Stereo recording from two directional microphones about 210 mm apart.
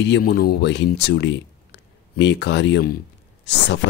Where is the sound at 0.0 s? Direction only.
55° left (ahead or behind).